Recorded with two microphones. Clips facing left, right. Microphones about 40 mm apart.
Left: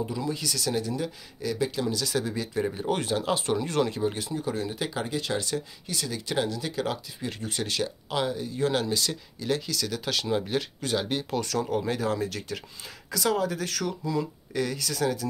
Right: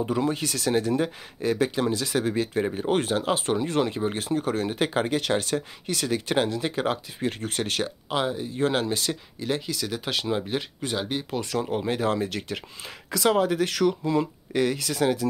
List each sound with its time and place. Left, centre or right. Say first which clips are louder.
0.0 s speech: right 5 dB; right
2.6 s speech: right 2 dB; right
2.9 s speech: right 4 dB; right
4.1 s speech: right 5 dB; right
8.1 s speech: right 3 dB; right
12.0 s speech: right 3 dB; right